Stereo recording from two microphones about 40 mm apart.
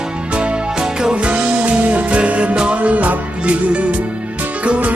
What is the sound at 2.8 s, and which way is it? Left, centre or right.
Music, right.